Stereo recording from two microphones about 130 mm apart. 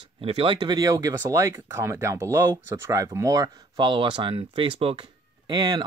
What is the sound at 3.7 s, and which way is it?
Speech, 40° right (ahead or behind).